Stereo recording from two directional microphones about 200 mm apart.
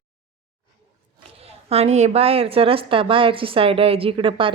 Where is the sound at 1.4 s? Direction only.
30° right (ahead or behind).